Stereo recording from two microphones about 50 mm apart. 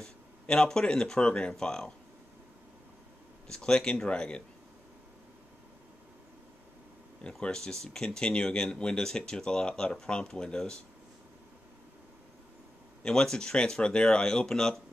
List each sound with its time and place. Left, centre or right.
0.0 s speech: centre
3.4 s speech: centre
7.2 s speech: centre
13.0 s speech: centre